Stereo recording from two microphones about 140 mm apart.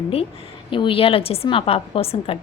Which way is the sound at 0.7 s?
40° left (ahead or behind).